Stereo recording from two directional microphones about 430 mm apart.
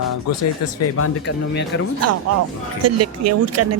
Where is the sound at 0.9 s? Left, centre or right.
Left.